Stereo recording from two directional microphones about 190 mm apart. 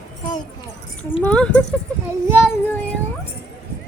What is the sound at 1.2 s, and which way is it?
Speech, 5° left (ahead or behind).